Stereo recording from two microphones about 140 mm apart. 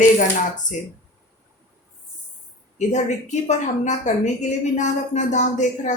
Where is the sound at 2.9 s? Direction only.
60° left (ahead or behind).